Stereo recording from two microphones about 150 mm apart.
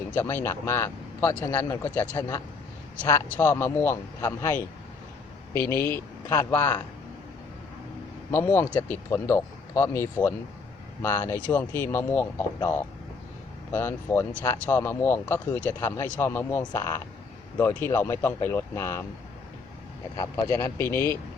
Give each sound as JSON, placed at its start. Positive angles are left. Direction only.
{"t": 0.1, "sound": "speech", "side_deg": 15}
{"t": 8.3, "sound": "speech", "side_deg": 15}
{"t": 20.1, "sound": "speech", "side_deg": 20}